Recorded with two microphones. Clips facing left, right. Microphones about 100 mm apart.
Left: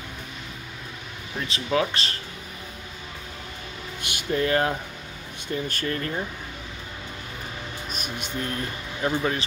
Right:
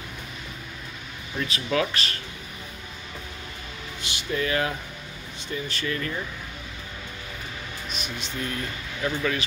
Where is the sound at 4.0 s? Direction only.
50° left (ahead or behind).